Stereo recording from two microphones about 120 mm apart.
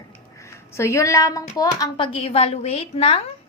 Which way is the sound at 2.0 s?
45° left (ahead or behind).